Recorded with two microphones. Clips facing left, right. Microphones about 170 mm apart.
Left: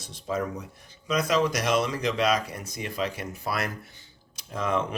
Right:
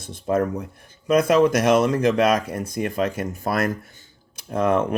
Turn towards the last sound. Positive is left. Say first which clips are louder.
# right 7 dB
turn(degrees=-55)  # may be behind; listen again after turning